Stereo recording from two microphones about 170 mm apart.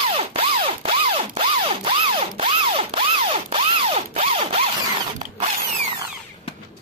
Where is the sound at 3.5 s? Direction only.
40° right (ahead or behind).